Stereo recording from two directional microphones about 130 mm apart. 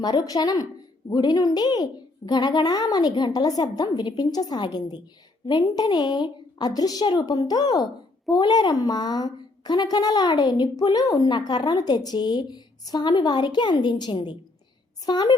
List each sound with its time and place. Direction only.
0.0 s a woman's voice: 30° left (ahead or behind)